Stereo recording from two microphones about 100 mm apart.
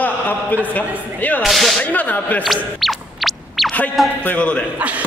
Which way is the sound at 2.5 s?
Centre (ahead or behind).